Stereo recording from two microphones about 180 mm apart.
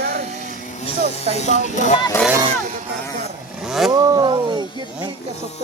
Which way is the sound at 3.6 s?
Centre (ahead or behind).